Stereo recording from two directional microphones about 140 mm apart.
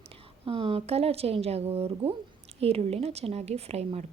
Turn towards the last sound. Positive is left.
turn(degrees=-50)  # may be behind; listen again after turning